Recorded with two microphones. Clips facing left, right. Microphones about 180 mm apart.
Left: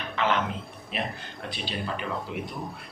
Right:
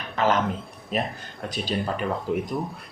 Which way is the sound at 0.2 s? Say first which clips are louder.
Right 4 dB; 40° right (ahead or behind).